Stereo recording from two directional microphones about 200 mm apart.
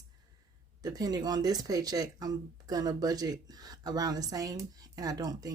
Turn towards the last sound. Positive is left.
turn(degrees=-20)  # may be behind; listen again after turning